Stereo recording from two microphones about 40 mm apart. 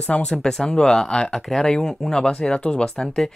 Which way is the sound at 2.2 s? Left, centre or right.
Left.